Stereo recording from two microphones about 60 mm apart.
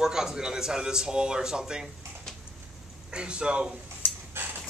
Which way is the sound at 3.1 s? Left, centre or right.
Centre.